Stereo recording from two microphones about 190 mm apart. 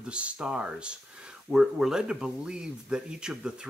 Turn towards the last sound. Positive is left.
turn(degrees=-5)  # may be behind; listen again after turning